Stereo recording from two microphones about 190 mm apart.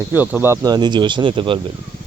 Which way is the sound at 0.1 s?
10° right (ahead or behind).